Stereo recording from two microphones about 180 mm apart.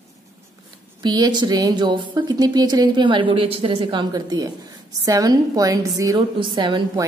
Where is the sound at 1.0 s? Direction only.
25° right (ahead or behind).